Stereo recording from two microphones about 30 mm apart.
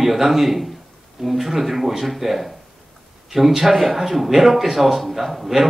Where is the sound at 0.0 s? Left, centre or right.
Centre.